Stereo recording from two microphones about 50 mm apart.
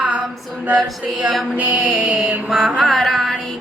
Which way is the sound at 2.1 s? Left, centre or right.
Right.